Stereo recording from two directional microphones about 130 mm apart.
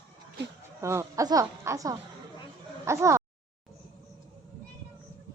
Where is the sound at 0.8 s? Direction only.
20° right (ahead or behind).